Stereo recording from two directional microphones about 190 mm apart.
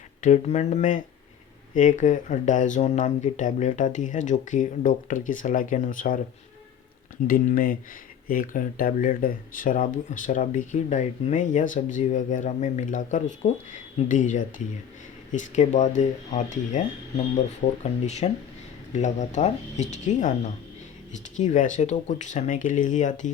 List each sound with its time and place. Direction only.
0.2 s speech: 35° left (ahead or behind)
7.3 s speech: 45° left (ahead or behind)